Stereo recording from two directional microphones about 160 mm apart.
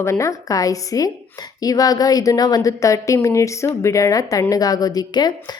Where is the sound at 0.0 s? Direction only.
15° left (ahead or behind).